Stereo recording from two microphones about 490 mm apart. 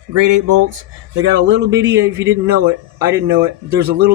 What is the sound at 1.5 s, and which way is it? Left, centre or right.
Speech, right.